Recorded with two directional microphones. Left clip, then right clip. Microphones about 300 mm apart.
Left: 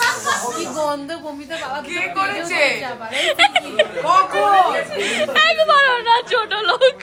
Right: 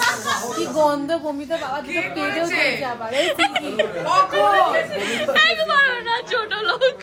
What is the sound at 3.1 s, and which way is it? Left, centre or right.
Speech, centre.